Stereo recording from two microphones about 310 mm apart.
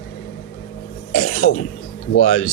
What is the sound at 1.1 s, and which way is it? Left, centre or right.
Throat clearing, left.